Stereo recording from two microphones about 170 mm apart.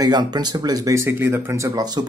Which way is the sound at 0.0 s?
25° right (ahead or behind).